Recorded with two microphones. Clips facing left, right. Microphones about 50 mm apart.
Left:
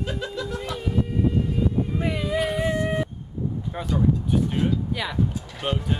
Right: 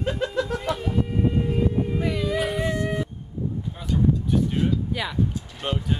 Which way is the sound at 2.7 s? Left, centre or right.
Left.